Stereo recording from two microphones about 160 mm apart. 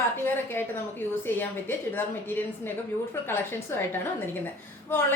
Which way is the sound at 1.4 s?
15° left (ahead or behind).